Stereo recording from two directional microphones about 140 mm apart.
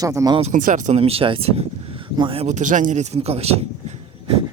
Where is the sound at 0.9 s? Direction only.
45° right (ahead or behind).